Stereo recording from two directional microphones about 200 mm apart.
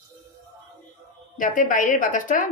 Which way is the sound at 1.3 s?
40° left (ahead or behind).